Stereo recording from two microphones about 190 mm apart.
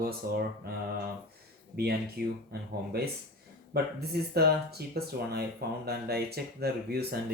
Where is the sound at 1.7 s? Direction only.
55° right (ahead or behind).